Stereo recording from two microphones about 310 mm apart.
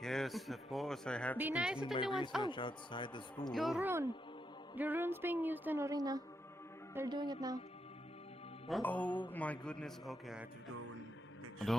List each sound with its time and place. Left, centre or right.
0.0 s speech: centre
1.8 s speech: centre
3.5 s speech: centre
8.6 s speech: centre